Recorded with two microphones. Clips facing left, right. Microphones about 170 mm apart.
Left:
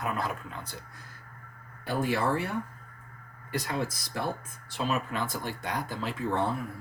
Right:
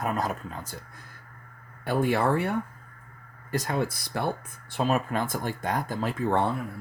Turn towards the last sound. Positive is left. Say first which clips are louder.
# right 4 dB
turn(degrees=-55)  # may be behind; listen again after turning